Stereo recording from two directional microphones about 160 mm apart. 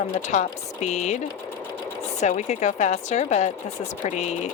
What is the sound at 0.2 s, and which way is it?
Speech, 50° left (ahead or behind).